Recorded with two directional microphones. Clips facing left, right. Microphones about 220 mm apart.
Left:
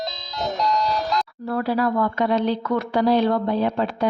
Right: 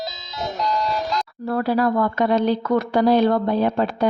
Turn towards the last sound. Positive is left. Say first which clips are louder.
# right 2 dB
turn(degrees=-45)  # may be behind; listen again after turning